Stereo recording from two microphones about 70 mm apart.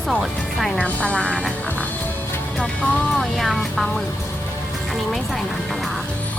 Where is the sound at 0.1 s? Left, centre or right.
Centre.